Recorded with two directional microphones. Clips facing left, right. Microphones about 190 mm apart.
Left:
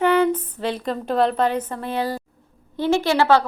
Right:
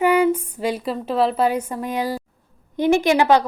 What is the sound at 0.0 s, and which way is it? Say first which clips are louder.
A woman's voice: right 1 dB; 10° right (ahead or behind).